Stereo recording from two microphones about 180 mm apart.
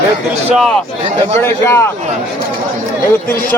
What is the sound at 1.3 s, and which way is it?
Speech, 15° left (ahead or behind).